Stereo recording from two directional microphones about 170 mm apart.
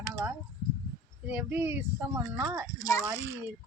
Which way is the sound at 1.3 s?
10° right (ahead or behind).